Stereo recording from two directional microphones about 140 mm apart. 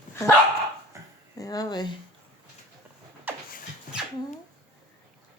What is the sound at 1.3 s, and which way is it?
Music, 25° left (ahead or behind).